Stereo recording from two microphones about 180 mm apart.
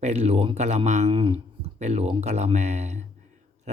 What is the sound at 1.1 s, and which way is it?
Speech, 25° right (ahead or behind).